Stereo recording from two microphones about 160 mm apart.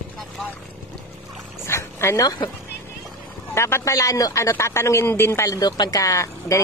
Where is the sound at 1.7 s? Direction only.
15° left (ahead or behind).